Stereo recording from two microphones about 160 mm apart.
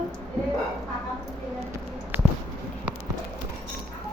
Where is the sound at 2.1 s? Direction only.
10° right (ahead or behind).